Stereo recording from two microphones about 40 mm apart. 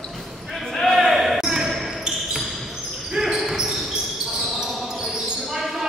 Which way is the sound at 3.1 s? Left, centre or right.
Centre.